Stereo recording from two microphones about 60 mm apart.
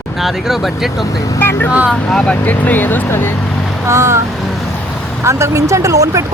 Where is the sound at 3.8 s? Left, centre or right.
Right.